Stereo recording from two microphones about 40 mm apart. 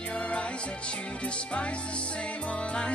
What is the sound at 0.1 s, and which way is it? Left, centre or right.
Music, left.